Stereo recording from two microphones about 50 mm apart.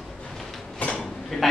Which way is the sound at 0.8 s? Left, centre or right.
Left.